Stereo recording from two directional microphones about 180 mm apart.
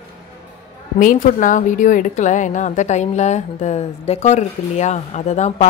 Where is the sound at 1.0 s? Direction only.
45° left (ahead or behind).